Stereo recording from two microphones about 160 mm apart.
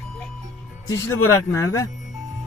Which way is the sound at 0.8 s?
20° left (ahead or behind).